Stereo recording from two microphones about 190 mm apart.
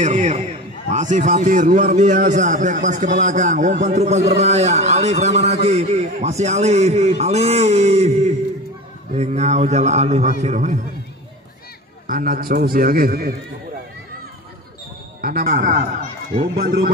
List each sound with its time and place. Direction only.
0.0 s a sound: 40° right (ahead or behind)
0.8 s a man's voice: 40° right (ahead or behind)
12.1 s a man's voice: 45° right (ahead or behind)
15.2 s a man's voice: 50° right (ahead or behind)